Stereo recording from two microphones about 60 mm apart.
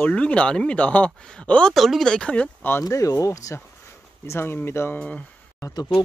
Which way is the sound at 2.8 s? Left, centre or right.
Left.